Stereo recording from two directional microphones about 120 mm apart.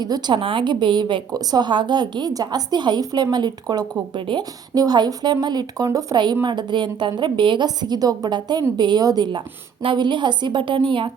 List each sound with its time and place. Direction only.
0.0 s a woman's voice: 35° right (ahead or behind)
0.3 s a woman's voice: 45° right (ahead or behind)